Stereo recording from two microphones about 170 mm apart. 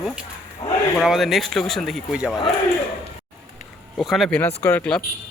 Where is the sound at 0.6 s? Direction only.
40° left (ahead or behind).